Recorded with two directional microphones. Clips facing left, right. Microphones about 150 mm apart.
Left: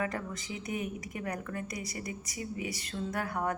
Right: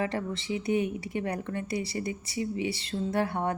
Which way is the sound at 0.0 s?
30° right (ahead or behind).